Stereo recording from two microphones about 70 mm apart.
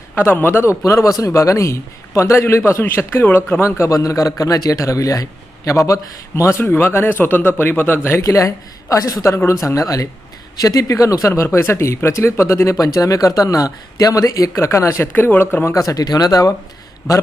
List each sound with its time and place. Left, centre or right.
0.2 s a man's voice: left
3.6 s a man's voice: left
8.2 s a man's voice: left
11.5 s a man's voice: left
12.8 s speech: left
15.0 s speech: left
15.6 s speech: left